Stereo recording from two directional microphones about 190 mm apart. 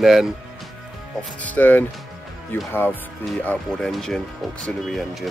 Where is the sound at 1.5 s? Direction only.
10° left (ahead or behind).